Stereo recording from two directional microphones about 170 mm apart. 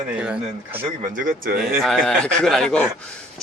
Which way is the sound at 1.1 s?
55° right (ahead or behind).